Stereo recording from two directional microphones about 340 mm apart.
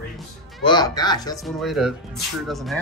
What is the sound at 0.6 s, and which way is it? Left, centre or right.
Speech, centre.